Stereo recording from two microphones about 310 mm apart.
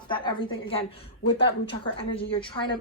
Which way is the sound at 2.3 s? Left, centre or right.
Centre.